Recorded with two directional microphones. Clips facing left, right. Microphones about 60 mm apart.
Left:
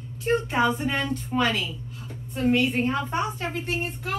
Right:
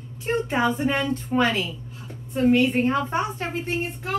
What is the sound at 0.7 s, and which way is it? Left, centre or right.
A woman's voice, right.